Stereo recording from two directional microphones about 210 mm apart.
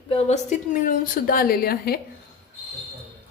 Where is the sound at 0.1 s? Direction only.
35° left (ahead or behind).